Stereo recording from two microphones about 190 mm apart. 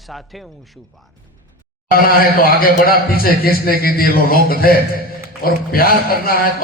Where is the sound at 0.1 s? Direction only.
Centre (ahead or behind).